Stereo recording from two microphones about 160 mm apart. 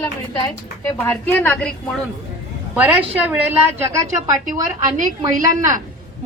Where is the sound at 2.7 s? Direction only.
10° right (ahead or behind).